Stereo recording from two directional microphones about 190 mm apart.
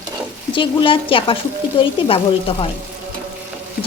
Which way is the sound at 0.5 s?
25° left (ahead or behind).